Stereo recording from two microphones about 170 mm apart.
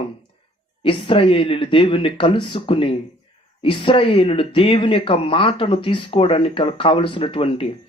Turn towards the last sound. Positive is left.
turn(degrees=30)  # may be behind; listen again after turning